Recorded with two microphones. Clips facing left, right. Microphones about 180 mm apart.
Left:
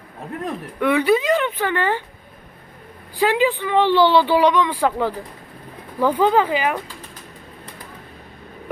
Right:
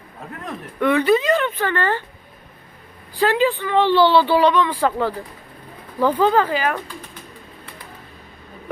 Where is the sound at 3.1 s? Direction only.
15° left (ahead or behind).